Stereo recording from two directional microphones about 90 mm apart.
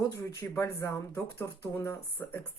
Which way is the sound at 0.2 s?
40° left (ahead or behind).